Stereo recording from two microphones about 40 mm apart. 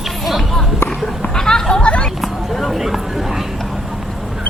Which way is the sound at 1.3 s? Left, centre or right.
Centre.